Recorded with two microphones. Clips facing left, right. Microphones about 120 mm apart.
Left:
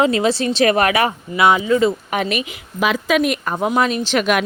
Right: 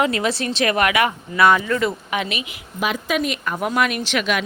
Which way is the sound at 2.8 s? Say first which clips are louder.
Left 5 dB; 90° left.